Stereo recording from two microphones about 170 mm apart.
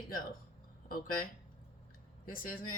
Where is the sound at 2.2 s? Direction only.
55° left (ahead or behind).